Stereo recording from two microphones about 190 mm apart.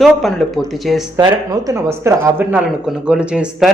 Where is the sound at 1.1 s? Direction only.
15° right (ahead or behind).